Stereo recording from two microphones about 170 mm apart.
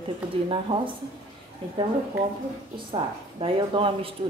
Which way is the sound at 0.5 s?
30° right (ahead or behind).